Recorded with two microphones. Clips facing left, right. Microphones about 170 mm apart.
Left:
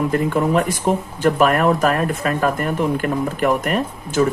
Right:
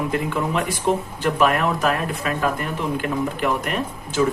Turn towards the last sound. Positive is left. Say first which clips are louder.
# left 4 dB
turn(degrees=45)  # may be behind; listen again after turning